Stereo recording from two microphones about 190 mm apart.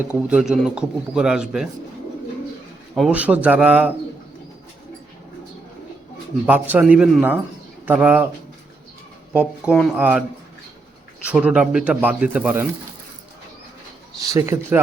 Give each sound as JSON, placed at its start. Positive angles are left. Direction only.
{"t": 0.1, "sound": "speech", "side_deg": -5}
{"t": 2.9, "sound": "speech", "side_deg": -5}
{"t": 6.4, "sound": "speech", "side_deg": -10}
{"t": 9.3, "sound": "speech", "side_deg": -5}
{"t": 11.3, "sound": "speech", "side_deg": -5}
{"t": 14.2, "sound": "speech", "side_deg": -15}